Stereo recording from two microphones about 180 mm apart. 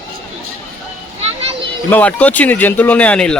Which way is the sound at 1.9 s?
10° left (ahead or behind).